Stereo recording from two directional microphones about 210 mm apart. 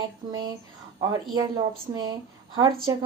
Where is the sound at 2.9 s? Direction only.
15° right (ahead or behind).